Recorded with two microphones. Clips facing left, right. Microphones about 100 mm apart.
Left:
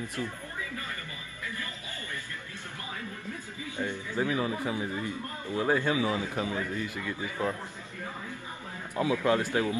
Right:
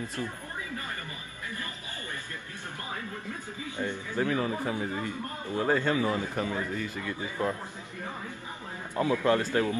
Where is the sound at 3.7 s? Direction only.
15° left (ahead or behind).